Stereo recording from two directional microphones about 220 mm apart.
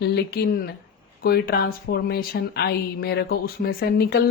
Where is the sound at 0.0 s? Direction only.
45° left (ahead or behind).